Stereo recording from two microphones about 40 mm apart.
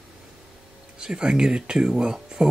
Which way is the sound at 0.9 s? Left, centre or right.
Centre.